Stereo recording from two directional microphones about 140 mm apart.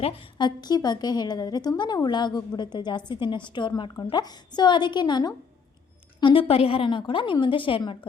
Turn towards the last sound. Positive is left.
turn(degrees=40)  # may be behind; listen again after turning